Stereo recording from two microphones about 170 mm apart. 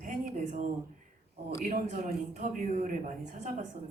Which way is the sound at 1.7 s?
45° right (ahead or behind).